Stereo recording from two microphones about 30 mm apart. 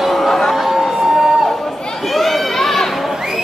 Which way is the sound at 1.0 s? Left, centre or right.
Centre.